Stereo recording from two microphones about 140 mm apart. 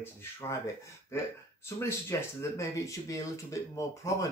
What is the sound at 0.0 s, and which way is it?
Speech, 20° left (ahead or behind).